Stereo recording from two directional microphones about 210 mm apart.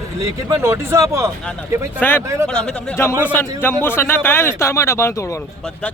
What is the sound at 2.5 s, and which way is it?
Speech, 5° left (ahead or behind).